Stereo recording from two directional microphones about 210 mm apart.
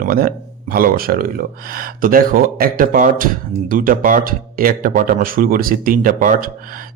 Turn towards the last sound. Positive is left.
turn(degrees=-40)  # may be behind; listen again after turning